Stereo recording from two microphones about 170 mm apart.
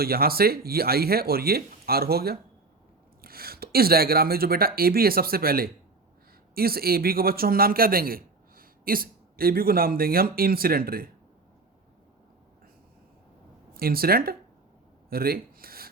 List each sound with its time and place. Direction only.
0.0 s a man's voice: 65° right (ahead or behind)
13.7 s a man's voice: 60° right (ahead or behind)
15.1 s a sound: 60° right (ahead or behind)